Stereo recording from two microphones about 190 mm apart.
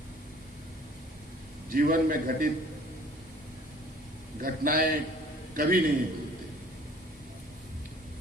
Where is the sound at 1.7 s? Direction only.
50° right (ahead or behind).